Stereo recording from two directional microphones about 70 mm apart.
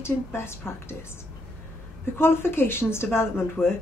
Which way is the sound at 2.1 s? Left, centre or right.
Left.